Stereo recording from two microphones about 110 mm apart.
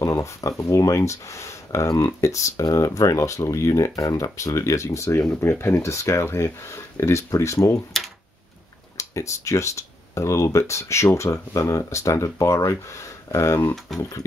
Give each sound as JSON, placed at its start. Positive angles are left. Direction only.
{"t": 0.0, "sound": "speech", "side_deg": 30}
{"t": 8.9, "sound": "speech", "side_deg": 30}
{"t": 13.9, "sound": "a sound", "side_deg": 5}